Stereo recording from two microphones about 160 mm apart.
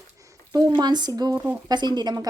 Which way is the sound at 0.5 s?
25° right (ahead or behind).